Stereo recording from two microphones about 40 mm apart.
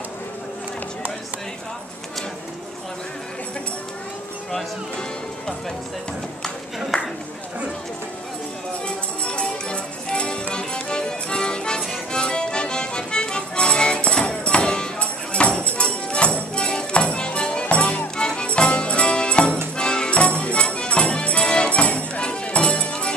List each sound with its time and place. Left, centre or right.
6.9 s a sound: centre
8.8 s music: left
18.1 s music: left